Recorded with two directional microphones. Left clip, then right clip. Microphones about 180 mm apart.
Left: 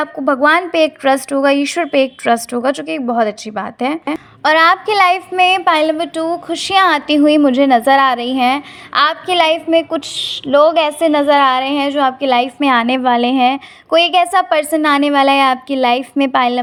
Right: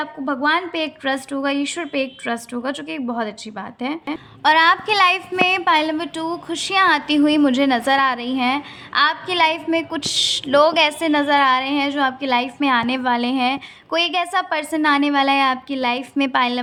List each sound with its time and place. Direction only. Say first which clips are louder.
0.0 s a woman's voice: left 8 dB; 40° left (ahead or behind)
4.4 s a woman's voice: left 4 dB; 30° left (ahead or behind)